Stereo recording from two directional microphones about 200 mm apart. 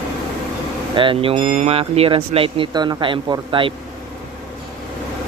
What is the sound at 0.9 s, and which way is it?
Speech, 25° right (ahead or behind).